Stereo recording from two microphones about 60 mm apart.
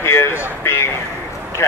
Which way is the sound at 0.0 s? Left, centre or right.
Left.